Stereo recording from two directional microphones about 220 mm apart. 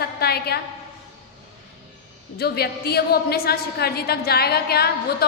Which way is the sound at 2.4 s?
45° left (ahead or behind).